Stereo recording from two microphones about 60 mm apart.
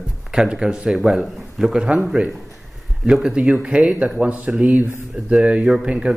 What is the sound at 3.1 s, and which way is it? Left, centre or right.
Speech, centre.